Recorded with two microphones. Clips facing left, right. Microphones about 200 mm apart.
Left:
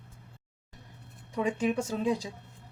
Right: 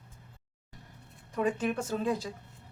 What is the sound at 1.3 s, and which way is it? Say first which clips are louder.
Speech: left 1 dB; 10° left (ahead or behind).